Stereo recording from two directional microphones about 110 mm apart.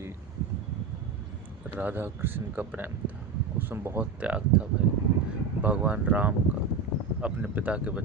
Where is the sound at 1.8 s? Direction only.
20° right (ahead or behind).